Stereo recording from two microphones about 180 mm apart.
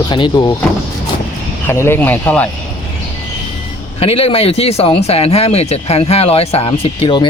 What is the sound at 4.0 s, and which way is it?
Speech, 35° left (ahead or behind).